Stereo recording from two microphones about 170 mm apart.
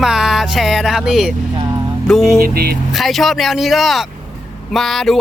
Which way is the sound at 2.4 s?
65° right (ahead or behind).